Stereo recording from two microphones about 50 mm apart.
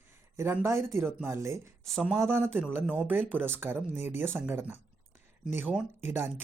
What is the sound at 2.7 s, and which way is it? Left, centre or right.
Speech, right.